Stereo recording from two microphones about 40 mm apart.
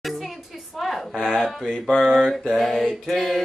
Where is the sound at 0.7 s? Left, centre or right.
Centre.